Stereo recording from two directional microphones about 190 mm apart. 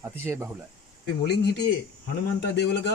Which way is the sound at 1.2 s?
60° left (ahead or behind).